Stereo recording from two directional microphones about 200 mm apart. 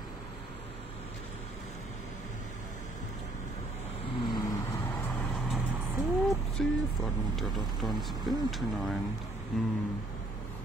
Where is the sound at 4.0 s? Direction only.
25° left (ahead or behind).